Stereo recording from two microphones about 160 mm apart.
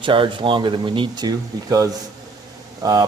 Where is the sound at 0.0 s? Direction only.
30° right (ahead or behind).